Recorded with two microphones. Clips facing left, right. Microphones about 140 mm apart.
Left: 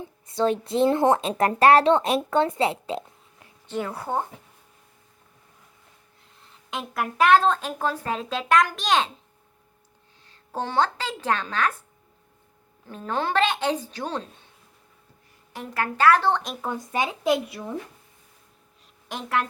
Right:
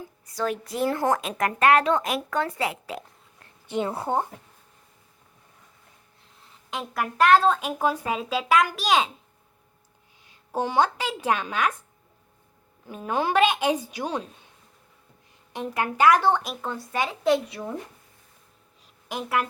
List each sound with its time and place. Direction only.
0.0 s speech: 25° left (ahead or behind)
3.7 s a woman's voice: 25° right (ahead or behind)
6.4 s speech: centre (ahead or behind)
10.2 s a woman's voice: 10° right (ahead or behind)
12.9 s a woman's voice: 10° right (ahead or behind)
15.5 s a woman's voice: 20° right (ahead or behind)
16.6 s speech: 15° left (ahead or behind)
17.3 s speech: 5° left (ahead or behind)
19.0 s a woman's voice: 5° right (ahead or behind)